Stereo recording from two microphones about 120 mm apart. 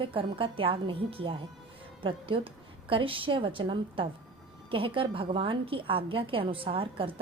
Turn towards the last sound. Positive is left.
turn(degrees=-50)  # may be behind; listen again after turning